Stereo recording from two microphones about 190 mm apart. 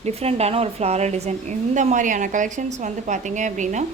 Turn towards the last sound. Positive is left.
turn(degrees=-40)  # may be behind; listen again after turning